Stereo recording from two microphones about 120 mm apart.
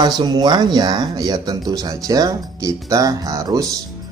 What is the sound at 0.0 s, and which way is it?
Speech, 35° right (ahead or behind).